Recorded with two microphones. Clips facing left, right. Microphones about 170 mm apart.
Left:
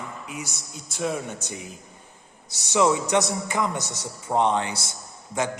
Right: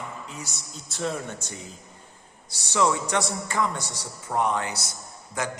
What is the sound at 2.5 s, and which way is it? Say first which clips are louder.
A man's voice: left 3 dB; 20° left (ahead or behind).